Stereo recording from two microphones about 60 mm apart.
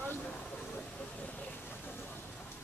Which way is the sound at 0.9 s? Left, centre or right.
Left.